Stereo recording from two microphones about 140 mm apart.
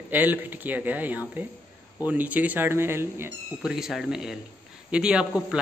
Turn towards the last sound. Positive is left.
turn(degrees=-5)  # may be behind; listen again after turning